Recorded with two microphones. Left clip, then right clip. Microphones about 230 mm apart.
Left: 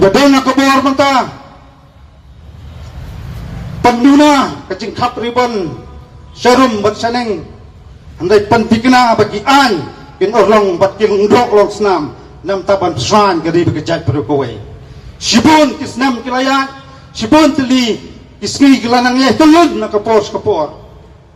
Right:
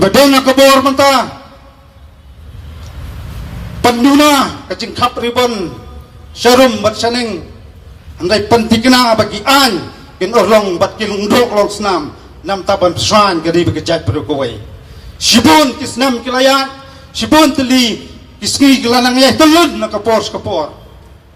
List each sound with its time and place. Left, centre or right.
0.0 s a man's voice: right
3.8 s a man's voice: right